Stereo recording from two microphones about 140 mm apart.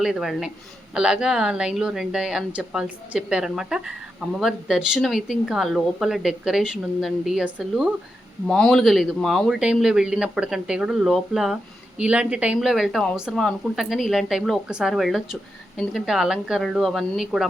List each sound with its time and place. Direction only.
0.0 s speech: centre (ahead or behind)